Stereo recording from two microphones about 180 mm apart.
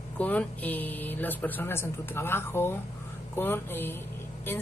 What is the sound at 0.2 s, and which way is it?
A woman's voice, 10° left (ahead or behind).